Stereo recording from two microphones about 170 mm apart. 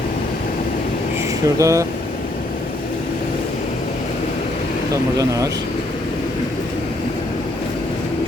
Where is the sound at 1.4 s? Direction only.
20° right (ahead or behind).